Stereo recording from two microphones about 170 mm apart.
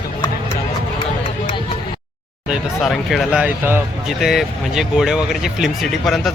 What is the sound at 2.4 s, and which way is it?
Speech, centre (ahead or behind).